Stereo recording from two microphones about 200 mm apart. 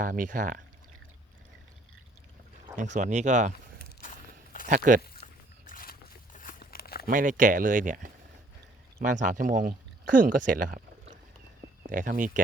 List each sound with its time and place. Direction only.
0.0 s speech: 40° right (ahead or behind)
2.9 s speech: 35° right (ahead or behind)
3.8 s a sound: 50° left (ahead or behind)
4.6 s speech: 40° right (ahead or behind)
5.2 s a sound: 45° left (ahead or behind)
7.1 s speech: 40° right (ahead or behind)